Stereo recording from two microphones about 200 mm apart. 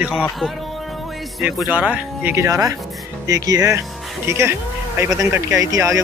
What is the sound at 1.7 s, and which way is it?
Speech, 5° right (ahead or behind).